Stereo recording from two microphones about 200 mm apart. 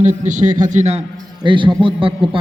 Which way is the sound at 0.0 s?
40° right (ahead or behind).